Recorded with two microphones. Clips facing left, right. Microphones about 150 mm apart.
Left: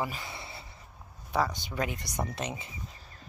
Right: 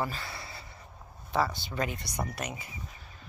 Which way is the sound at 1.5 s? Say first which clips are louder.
Even; 15° left (ahead or behind).